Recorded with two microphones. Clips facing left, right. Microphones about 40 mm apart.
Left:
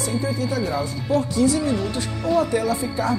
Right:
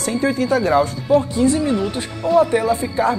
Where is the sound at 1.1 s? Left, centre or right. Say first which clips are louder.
Right 3 dB; right.